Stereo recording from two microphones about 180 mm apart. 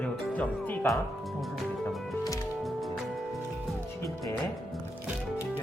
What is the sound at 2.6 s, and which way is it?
Music, centre (ahead or behind).